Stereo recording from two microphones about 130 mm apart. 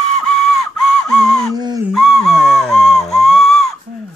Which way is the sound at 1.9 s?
Centre (ahead or behind).